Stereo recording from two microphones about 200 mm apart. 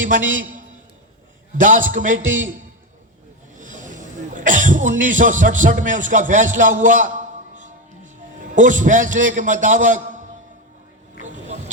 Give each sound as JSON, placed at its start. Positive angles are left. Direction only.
{"t": 0.0, "sound": "a man's voice", "side_deg": -40}
{"t": 3.6, "sound": "a man's voice", "side_deg": -40}
{"t": 8.5, "sound": "a man's voice", "side_deg": -40}
{"t": 11.2, "sound": "music", "side_deg": -35}